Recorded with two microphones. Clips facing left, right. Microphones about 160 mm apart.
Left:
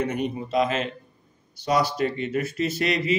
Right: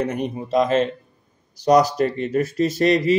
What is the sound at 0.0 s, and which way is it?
Speech, 40° right (ahead or behind).